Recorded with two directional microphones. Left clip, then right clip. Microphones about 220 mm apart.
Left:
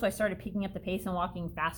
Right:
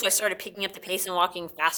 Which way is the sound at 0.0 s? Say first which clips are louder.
Right 4 dB; 35° right (ahead or behind).